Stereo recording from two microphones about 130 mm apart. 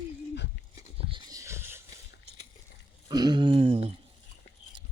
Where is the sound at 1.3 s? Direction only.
25° right (ahead or behind).